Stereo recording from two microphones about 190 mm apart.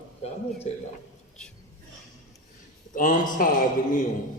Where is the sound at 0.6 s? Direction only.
35° left (ahead or behind).